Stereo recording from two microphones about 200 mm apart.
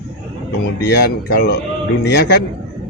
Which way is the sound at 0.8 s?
55° left (ahead or behind).